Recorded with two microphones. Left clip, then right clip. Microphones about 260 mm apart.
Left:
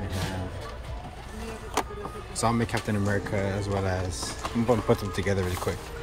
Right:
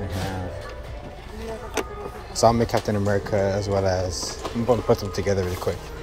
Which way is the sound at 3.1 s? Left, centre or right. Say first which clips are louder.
Right 8 dB; left.